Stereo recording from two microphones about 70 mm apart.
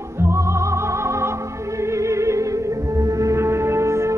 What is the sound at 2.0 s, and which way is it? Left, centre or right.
Music, right.